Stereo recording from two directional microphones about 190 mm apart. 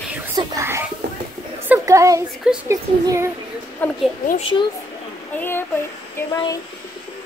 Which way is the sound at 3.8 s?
10° left (ahead or behind).